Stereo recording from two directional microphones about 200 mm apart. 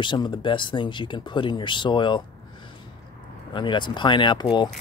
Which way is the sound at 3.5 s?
25° left (ahead or behind).